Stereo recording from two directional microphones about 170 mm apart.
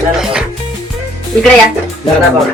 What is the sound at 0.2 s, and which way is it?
Music, 5° right (ahead or behind).